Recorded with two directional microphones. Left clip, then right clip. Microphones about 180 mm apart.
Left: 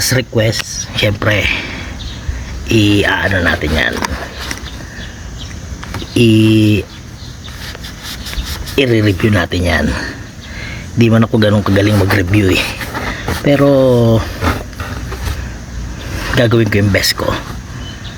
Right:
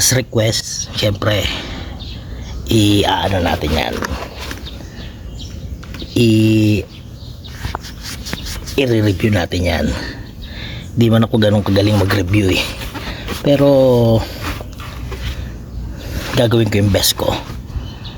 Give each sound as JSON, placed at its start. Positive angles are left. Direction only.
{"t": 0.0, "sound": "speech", "side_deg": -5}
{"t": 6.1, "sound": "speech", "side_deg": 0}
{"t": 8.7, "sound": "a man's voice", "side_deg": 0}
{"t": 16.3, "sound": "speech", "side_deg": 0}